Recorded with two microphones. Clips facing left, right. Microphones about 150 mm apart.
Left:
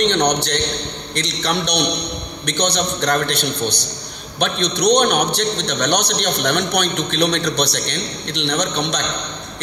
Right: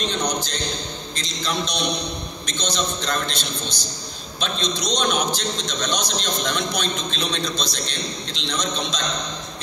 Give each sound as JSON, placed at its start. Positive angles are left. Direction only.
{"t": 0.0, "sound": "a man's voice", "side_deg": 75}